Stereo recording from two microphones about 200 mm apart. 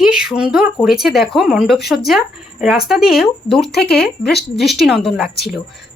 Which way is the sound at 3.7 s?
55° left (ahead or behind).